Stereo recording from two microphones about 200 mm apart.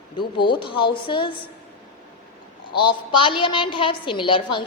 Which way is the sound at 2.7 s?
25° left (ahead or behind).